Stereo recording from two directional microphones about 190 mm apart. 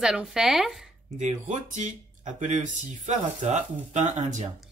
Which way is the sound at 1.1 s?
40° right (ahead or behind).